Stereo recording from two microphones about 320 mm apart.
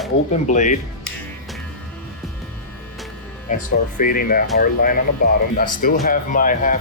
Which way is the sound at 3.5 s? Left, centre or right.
Left.